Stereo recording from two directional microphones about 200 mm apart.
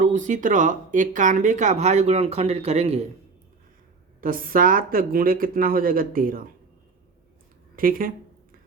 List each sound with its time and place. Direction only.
0.0 s speech: 40° right (ahead or behind)
4.2 s speech: 45° right (ahead or behind)
7.8 s speech: 45° right (ahead or behind)